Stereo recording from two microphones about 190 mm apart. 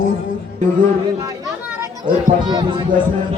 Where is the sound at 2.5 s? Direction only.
20° right (ahead or behind).